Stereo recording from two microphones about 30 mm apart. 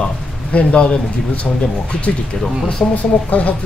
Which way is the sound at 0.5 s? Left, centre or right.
Left.